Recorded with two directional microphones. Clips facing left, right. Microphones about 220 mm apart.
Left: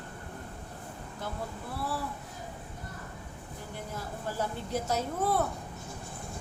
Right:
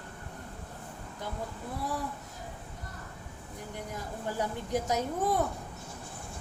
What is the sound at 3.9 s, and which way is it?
A woman's voice, 15° right (ahead or behind).